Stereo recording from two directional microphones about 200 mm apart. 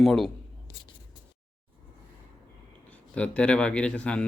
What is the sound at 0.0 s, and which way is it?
Speech, centre (ahead or behind).